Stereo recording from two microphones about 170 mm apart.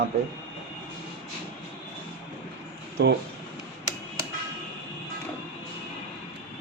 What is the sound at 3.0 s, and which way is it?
Speech, 70° right (ahead or behind).